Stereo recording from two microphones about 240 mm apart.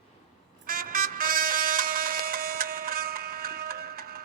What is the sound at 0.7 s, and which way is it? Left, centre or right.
Vehicle, right.